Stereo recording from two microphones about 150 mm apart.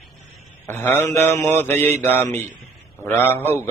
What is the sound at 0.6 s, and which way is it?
Mantra, 15° left (ahead or behind).